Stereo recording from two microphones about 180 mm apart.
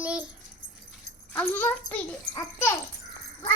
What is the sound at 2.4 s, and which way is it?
Babbling, 15° left (ahead or behind).